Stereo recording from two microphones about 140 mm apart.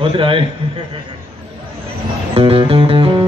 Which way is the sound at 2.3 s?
40° right (ahead or behind).